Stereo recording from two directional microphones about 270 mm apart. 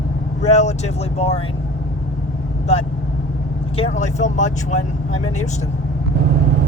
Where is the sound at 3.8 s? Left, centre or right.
Left.